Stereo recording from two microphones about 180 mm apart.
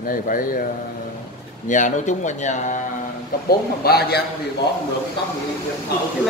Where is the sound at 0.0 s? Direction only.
50° left (ahead or behind).